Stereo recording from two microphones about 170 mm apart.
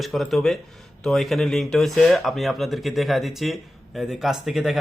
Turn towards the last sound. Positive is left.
turn(degrees=0)  # may be behind; listen again after turning